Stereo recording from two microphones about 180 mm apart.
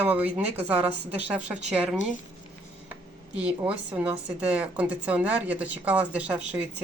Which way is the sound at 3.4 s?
10° right (ahead or behind).